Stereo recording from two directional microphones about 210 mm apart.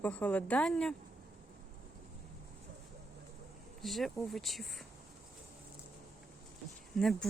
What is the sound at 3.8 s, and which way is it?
Speech, centre (ahead or behind).